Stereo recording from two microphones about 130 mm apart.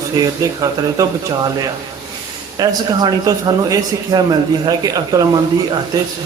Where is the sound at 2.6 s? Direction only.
30° right (ahead or behind).